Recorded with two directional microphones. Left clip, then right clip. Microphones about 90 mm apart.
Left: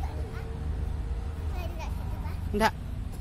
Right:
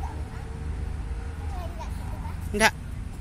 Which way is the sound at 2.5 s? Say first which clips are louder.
Right 4 dB; 20° left (ahead or behind).